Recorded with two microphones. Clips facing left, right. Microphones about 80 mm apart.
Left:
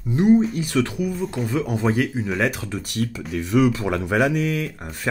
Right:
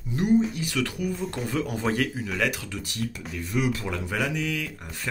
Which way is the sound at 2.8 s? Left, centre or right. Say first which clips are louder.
Left 7 dB; left.